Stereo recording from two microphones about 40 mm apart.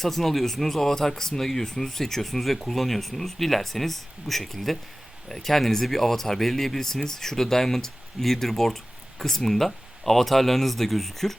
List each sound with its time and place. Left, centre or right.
0.0 s speech: centre